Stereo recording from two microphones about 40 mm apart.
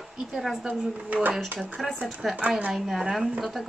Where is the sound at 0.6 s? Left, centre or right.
Right.